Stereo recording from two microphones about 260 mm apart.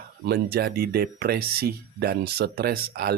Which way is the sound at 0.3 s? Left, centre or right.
Right.